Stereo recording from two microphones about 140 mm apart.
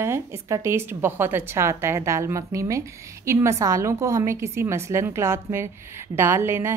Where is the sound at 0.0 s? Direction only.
20° right (ahead or behind).